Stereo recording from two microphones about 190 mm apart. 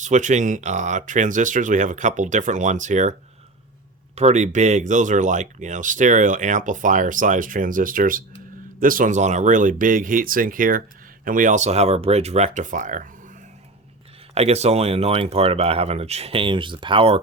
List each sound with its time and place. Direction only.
0.0 s speech: 40° right (ahead or behind)
14.3 s speech: 35° right (ahead or behind)